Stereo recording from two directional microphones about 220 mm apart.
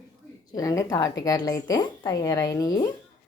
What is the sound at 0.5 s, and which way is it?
A woman's voice, 15° left (ahead or behind).